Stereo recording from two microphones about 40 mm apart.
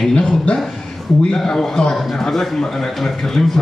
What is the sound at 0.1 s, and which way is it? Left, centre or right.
A man's voice, left.